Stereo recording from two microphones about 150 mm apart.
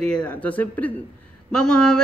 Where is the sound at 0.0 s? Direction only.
5° left (ahead or behind).